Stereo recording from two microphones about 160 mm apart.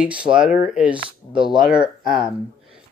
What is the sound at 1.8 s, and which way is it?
Speech, 30° right (ahead or behind).